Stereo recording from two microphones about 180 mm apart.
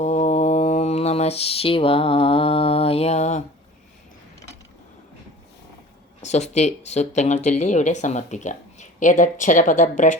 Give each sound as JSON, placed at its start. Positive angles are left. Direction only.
{"t": 0.0, "sound": "mantra", "side_deg": 40}
{"t": 6.2, "sound": "speech", "side_deg": 40}